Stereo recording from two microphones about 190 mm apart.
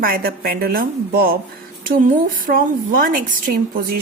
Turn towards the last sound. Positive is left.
turn(degrees=-50)  # may be behind; listen again after turning